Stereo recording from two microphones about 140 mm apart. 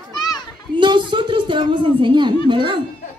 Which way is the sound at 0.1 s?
30° left (ahead or behind).